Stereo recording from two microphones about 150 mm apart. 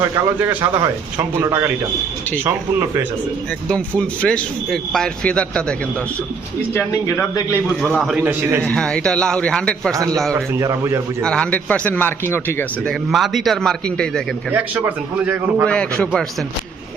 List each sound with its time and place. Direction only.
0.0 s speech: 15° right (ahead or behind)
3.7 s speech: 10° left (ahead or behind)
6.7 s speech: 15° left (ahead or behind)
7.9 s speech: centre (ahead or behind)
8.1 s speech: 10° right (ahead or behind)
8.6 s speech: 5° left (ahead or behind)
9.9 s a man's voice: 20° right (ahead or behind)
11.2 s speech: 5° left (ahead or behind)
12.9 s speech: centre (ahead or behind)
14.5 s speech: 10° right (ahead or behind)
15.6 s speech: 5° left (ahead or behind)